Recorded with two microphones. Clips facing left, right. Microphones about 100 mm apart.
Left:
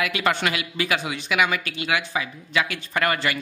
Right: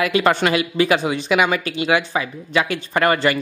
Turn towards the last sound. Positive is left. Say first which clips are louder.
# right 6 dB
turn(degrees=-30)  # may be behind; listen again after turning